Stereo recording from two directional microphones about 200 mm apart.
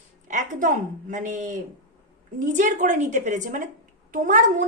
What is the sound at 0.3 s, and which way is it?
A woman's voice, 40° right (ahead or behind).